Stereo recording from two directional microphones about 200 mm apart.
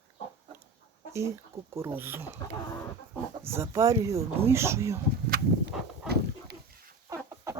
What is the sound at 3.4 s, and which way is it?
Speech, 15° right (ahead or behind).